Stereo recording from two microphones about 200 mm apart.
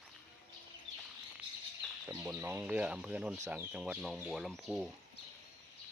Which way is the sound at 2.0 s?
10° right (ahead or behind).